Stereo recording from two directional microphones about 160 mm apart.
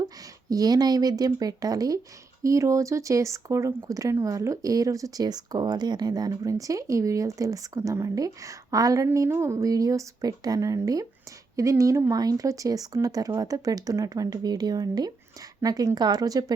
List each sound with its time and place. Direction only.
0.5 s speech: 25° right (ahead or behind)